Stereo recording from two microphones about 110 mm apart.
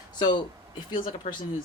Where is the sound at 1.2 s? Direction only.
90° left.